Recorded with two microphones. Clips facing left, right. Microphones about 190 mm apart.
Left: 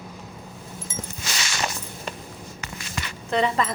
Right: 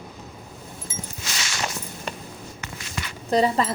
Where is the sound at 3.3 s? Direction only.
35° right (ahead or behind).